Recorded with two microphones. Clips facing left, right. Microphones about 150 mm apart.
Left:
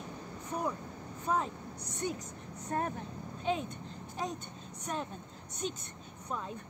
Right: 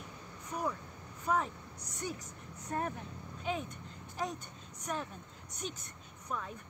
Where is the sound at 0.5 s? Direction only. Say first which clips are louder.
Left 1 dB; 25° left (ahead or behind).